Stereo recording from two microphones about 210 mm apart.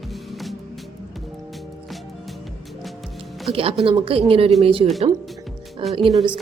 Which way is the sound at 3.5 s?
25° right (ahead or behind).